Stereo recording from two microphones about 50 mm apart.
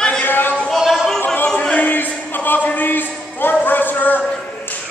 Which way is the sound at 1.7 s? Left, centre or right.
Left.